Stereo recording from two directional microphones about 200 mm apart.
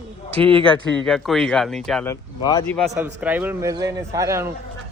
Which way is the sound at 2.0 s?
15° left (ahead or behind).